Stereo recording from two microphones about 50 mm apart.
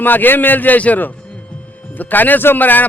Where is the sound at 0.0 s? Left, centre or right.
Left.